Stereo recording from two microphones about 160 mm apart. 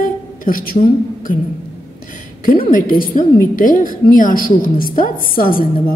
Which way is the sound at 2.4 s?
60° left (ahead or behind).